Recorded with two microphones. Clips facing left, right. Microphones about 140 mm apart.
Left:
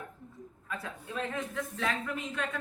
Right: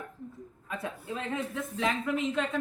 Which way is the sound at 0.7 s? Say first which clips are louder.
Right 3 dB; 20° right (ahead or behind).